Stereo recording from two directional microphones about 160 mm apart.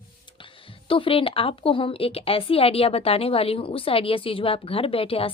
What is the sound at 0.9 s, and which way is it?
Speech, 35° left (ahead or behind).